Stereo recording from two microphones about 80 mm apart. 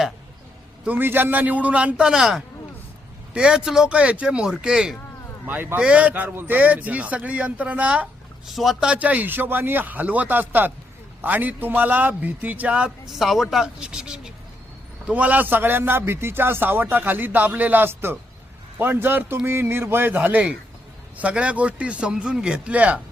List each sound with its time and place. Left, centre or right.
0.9 s a man's voice: right; by 4.9 s centre
5.5 s a man's voice: right
8.4 s speech: centre
8.9 s a man's voice: centre
13.1 s a woman's voice: centre